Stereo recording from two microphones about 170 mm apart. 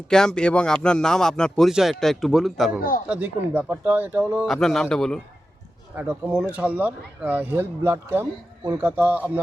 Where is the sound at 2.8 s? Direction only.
55° left (ahead or behind).